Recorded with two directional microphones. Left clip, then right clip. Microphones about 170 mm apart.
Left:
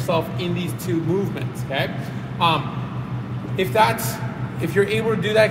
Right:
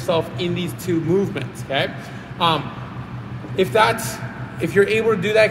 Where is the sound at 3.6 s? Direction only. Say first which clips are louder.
Right 2 dB; 20° right (ahead or behind).